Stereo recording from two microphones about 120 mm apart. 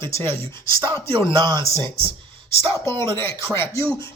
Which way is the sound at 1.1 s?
40° right (ahead or behind).